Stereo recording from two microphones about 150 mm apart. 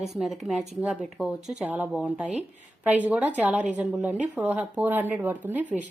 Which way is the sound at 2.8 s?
10° right (ahead or behind).